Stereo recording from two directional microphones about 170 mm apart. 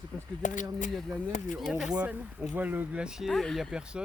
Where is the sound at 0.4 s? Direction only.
50° left (ahead or behind).